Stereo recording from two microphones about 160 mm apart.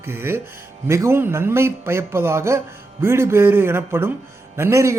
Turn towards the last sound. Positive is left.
turn(degrees=-20)  # may be behind; listen again after turning